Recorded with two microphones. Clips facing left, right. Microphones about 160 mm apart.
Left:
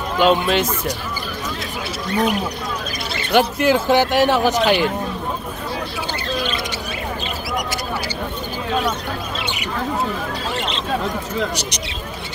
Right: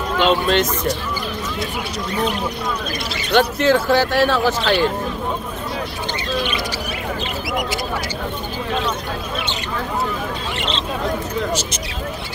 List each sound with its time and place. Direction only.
0.2 s speech: 10° left (ahead or behind)
3.3 s speech: 10° left (ahead or behind)